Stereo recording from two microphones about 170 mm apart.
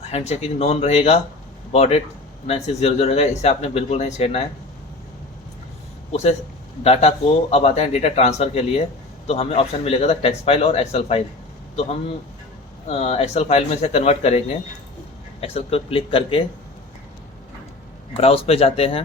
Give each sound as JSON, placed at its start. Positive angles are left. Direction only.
{"t": 0.1, "sound": "a man's voice", "side_deg": 40}
{"t": 6.1, "sound": "a man's voice", "side_deg": 40}
{"t": 12.9, "sound": "a man's voice", "side_deg": 35}
{"t": 18.1, "sound": "a man's voice", "side_deg": 35}